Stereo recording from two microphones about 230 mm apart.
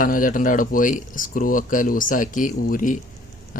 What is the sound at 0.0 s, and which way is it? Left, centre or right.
Speech, left.